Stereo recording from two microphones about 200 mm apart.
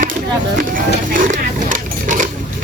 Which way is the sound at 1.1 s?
40° right (ahead or behind).